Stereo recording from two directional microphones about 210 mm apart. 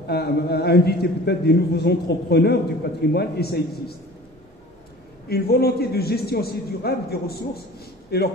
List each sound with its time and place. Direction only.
0.0 s a man's voice: 50° left (ahead or behind)
5.3 s a man's voice: 50° left (ahead or behind)